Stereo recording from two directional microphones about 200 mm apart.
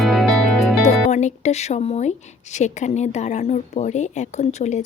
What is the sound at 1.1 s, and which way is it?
A woman's voice, 35° left (ahead or behind).